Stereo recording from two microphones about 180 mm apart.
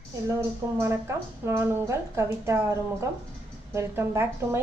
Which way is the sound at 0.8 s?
15° right (ahead or behind).